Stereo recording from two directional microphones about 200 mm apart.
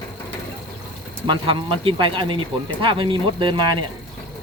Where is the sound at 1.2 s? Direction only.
25° right (ahead or behind).